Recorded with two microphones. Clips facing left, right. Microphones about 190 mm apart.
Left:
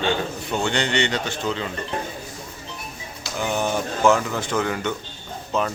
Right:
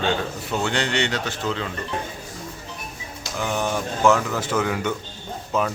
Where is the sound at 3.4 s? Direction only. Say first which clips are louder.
Left 1 dB; centre (ahead or behind).